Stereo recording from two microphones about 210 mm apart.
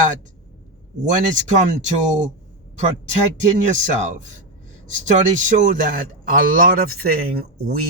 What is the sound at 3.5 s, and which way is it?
Speech, 35° right (ahead or behind).